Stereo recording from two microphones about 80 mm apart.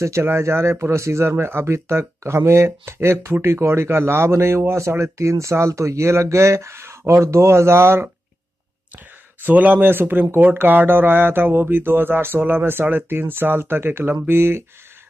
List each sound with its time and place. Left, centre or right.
0.0 s speech: right
9.4 s speech: right